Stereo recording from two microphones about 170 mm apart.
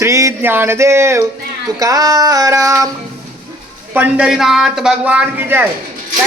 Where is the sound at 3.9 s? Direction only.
5° right (ahead or behind).